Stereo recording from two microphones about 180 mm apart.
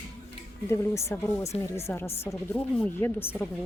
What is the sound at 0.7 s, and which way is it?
Speech, 15° left (ahead or behind).